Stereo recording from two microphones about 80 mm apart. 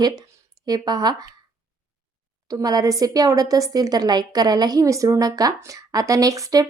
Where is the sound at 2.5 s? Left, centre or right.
Right.